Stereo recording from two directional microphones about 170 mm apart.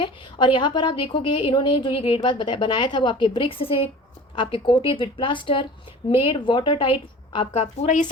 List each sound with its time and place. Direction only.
0.0 s a woman's voice: 30° left (ahead or behind); by 8.1 s 45° left (ahead or behind)